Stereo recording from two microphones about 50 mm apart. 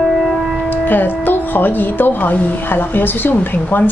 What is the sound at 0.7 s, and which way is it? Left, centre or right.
A woman's voice, left.